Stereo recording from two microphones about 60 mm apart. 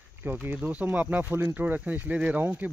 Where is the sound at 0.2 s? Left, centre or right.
Right.